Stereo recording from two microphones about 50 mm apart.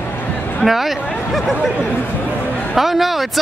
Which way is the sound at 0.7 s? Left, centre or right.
Centre.